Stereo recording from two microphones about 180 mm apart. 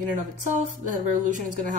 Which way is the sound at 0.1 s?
45° right (ahead or behind).